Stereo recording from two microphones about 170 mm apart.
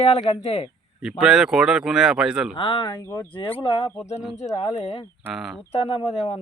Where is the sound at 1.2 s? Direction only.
5° right (ahead or behind).